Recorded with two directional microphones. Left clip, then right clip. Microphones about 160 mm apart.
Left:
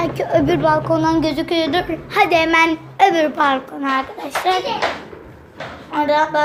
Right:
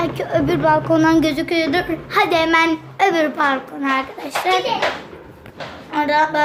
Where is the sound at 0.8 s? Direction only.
20° right (ahead or behind).